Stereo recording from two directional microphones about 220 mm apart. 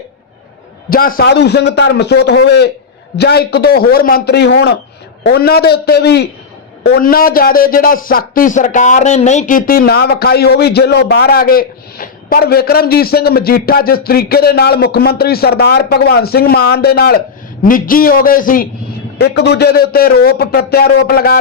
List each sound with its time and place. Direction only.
0.9 s a man's voice: 40° left (ahead or behind)
19.2 s a man's voice: 50° left (ahead or behind)